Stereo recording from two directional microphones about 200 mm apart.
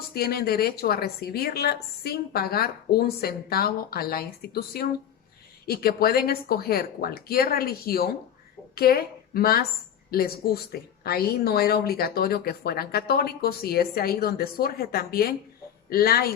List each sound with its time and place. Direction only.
0.1 s a woman's voice: 50° left (ahead or behind)